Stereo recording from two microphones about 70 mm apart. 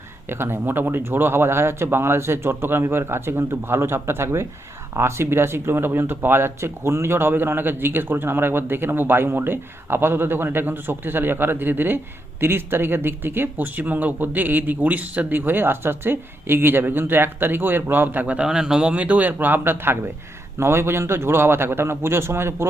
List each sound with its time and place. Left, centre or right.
0.3 s speech: right
18.4 s a man's voice: centre; by 22.7 s right